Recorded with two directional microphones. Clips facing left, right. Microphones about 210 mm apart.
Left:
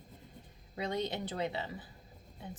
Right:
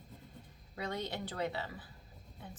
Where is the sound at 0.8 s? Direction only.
20° left (ahead or behind).